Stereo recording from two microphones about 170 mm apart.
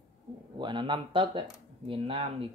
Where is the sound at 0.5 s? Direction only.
25° right (ahead or behind).